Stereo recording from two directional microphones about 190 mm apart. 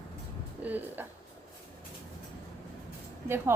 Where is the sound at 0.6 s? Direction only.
10° right (ahead or behind).